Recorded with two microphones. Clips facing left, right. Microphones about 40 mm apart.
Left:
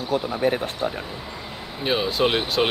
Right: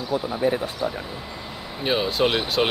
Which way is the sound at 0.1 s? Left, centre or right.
Left.